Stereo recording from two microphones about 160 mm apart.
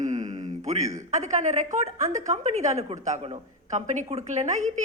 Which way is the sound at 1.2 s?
45° right (ahead or behind).